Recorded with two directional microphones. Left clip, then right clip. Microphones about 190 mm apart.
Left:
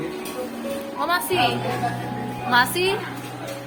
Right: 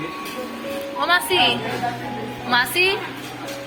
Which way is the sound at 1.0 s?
5° left (ahead or behind).